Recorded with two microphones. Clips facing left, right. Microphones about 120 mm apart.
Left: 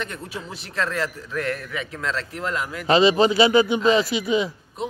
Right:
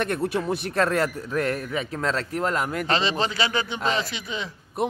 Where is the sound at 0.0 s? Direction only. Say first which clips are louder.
Right 8 dB; 55° right (ahead or behind).